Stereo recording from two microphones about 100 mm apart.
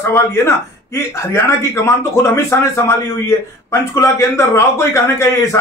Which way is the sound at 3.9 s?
30° left (ahead or behind).